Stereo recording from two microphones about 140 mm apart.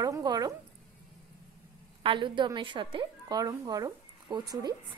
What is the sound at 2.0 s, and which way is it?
A woman's voice, 35° right (ahead or behind).